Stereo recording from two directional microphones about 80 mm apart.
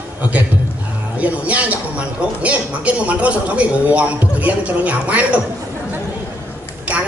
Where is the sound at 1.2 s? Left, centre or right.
Centre.